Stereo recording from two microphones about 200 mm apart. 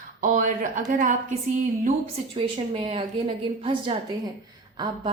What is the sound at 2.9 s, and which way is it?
A woman's voice, 25° right (ahead or behind).